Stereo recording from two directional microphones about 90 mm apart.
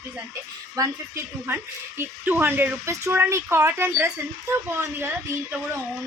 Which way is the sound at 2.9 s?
35° right (ahead or behind).